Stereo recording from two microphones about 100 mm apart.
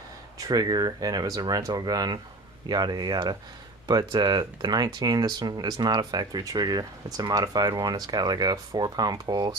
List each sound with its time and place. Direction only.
0.3 s speech: 40° right (ahead or behind)